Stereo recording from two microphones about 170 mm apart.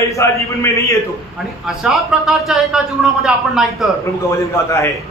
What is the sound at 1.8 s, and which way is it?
Speech, centre (ahead or behind).